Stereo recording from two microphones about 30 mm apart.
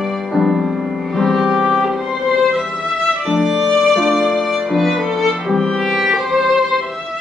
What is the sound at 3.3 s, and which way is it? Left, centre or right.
Music, centre.